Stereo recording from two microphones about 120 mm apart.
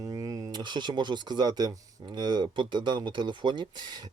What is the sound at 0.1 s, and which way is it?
Speech, 35° right (ahead or behind).